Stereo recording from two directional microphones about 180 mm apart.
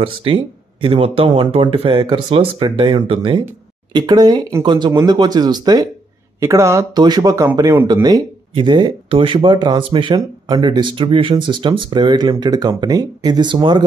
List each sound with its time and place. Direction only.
0.0 s speech: 30° right (ahead or behind)